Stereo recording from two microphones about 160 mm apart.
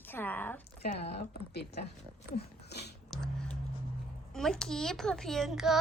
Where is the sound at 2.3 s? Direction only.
90° left.